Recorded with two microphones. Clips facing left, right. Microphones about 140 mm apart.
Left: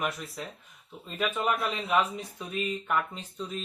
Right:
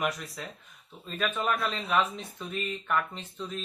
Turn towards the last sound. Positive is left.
turn(degrees=5)  # may be behind; listen again after turning